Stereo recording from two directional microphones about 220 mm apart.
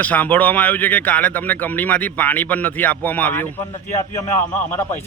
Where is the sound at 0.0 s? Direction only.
10° left (ahead or behind).